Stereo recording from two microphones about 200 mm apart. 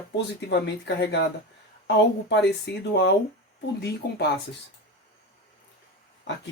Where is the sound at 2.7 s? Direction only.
60° left (ahead or behind).